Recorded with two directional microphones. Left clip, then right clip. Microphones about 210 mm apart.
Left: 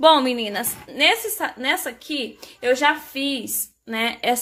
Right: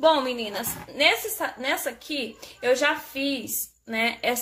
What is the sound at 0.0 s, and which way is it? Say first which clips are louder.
A woman's voice: left 5 dB; 35° left (ahead or behind).